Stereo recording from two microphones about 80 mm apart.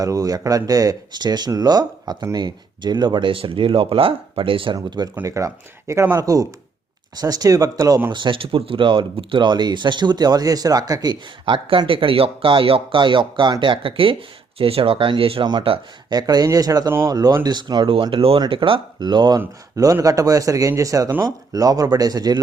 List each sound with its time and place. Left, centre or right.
0.0 s speech: right
5.2 s speech: right
8.1 s speech: right
16.0 s speech: right
17.4 s speech: right
19.7 s speech: right